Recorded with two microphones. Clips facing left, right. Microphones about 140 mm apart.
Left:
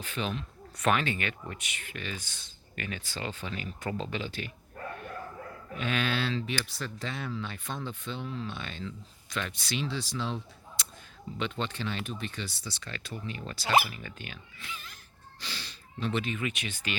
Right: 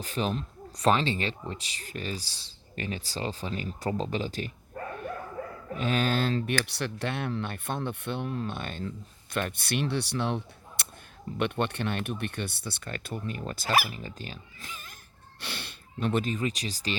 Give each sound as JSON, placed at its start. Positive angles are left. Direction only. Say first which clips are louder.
{"t": 0.0, "sound": "speech", "louder": "right 4 dB", "side_deg": -40}
{"t": 5.7, "sound": "speech", "louder": "right 4 dB", "side_deg": -40}
{"t": 13.8, "sound": "speech", "louder": "right 3 dB", "side_deg": -35}
{"t": 15.4, "sound": "speech", "louder": "right 3 dB", "side_deg": -60}